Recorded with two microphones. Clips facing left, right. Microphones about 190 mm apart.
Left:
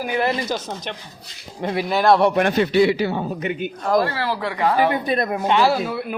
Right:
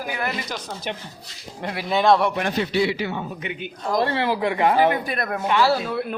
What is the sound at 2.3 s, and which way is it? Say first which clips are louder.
A man's voice: left 6 dB; 55° left (ahead or behind).